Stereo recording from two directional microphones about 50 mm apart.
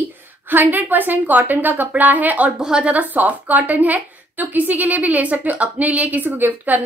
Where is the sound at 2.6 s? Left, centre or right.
Centre.